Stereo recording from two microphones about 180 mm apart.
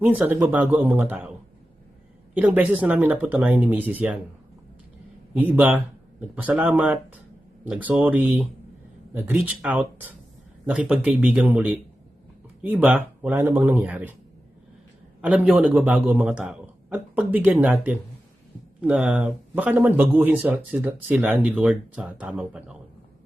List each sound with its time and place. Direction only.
0.0 s speech: 10° right (ahead or behind)
2.3 s speech: 10° right (ahead or behind)
5.3 s speech: 10° right (ahead or behind)
15.2 s speech: 10° right (ahead or behind)